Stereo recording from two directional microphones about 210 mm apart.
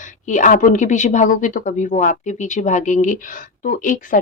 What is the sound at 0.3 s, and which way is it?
Speech, 35° left (ahead or behind).